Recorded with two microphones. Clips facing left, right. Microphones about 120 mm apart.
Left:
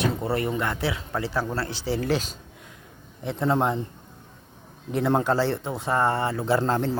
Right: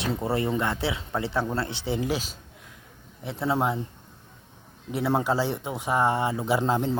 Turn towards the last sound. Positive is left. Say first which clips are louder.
# left 1 dB
turn(degrees=-15)  # may be behind; listen again after turning